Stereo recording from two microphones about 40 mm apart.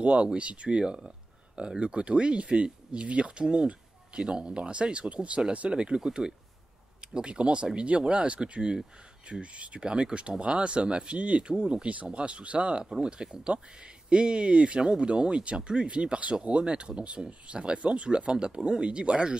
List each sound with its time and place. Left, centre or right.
0.0 s speech: right
0.9 s a sound: centre
1.8 s speech: right
11.9 s speech: right